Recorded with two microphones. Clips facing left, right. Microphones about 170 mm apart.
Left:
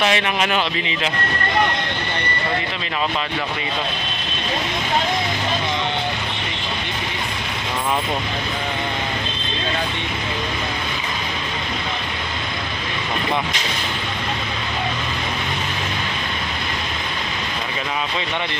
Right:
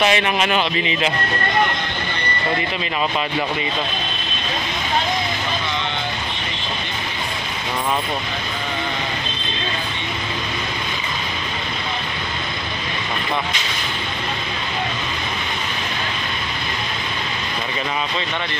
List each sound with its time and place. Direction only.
0.0 s speech: centre (ahead or behind)